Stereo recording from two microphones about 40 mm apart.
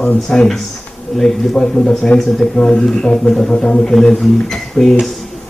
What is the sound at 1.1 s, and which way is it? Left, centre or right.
Speech, centre.